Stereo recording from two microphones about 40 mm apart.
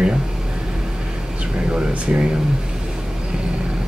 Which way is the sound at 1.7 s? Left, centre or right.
Right.